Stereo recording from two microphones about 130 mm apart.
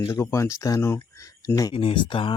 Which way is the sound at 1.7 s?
40° left (ahead or behind).